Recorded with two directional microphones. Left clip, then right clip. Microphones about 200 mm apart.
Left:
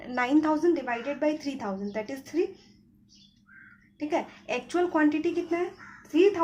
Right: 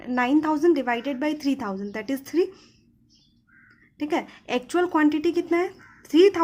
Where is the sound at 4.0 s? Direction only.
35° right (ahead or behind).